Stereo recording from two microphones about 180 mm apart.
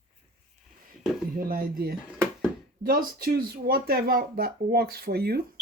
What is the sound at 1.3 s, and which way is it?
Speech, 55° right (ahead or behind).